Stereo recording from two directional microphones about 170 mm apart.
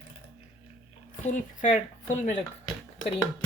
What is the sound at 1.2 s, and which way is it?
Speech, 45° left (ahead or behind).